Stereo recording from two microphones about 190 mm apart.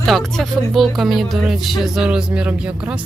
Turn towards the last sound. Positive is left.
turn(degrees=-5)  # may be behind; listen again after turning